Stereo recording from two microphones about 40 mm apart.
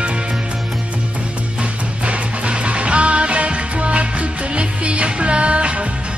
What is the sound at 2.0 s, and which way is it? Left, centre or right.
Music, right.